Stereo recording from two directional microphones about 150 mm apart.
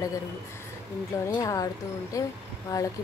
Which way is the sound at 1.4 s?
25° left (ahead or behind).